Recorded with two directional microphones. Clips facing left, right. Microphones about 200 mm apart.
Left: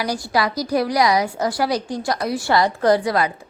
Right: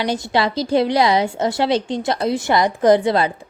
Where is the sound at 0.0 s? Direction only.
25° right (ahead or behind).